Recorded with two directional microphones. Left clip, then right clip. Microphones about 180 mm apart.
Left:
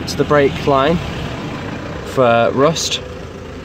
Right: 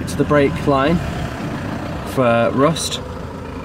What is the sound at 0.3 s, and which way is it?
Speech, 5° right (ahead or behind).